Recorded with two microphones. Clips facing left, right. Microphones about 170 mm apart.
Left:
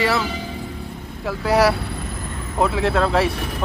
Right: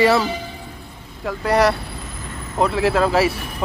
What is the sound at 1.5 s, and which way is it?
Speech, 5° left (ahead or behind).